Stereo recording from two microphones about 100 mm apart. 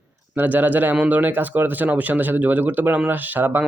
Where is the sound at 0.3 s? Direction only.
15° right (ahead or behind).